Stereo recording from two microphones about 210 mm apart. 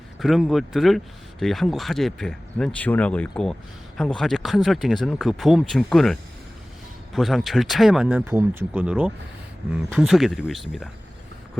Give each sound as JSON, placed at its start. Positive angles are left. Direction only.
{"t": 0.2, "sound": "speech", "side_deg": 0}